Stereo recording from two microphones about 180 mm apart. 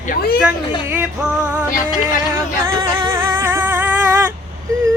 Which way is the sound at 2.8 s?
25° right (ahead or behind).